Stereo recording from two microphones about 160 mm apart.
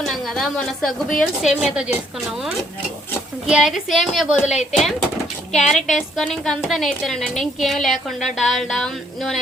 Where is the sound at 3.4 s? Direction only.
5° right (ahead or behind).